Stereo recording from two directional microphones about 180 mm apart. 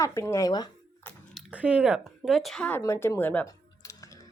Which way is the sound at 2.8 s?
15° left (ahead or behind).